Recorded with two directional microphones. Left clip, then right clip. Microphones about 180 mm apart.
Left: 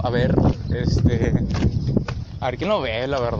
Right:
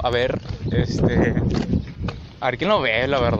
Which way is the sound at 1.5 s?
25° left (ahead or behind).